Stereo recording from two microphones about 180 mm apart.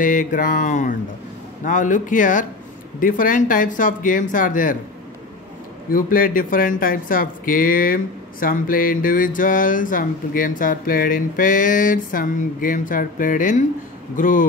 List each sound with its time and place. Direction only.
0.0 s speech: 50° left (ahead or behind)
5.9 s speech: 50° left (ahead or behind)